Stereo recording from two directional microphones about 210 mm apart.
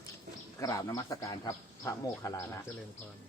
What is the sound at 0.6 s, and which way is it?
Speech, 15° left (ahead or behind).